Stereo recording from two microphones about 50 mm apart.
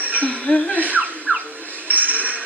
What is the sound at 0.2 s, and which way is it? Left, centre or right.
Speech, left.